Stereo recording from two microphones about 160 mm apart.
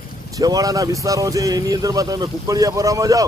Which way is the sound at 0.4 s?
20° right (ahead or behind).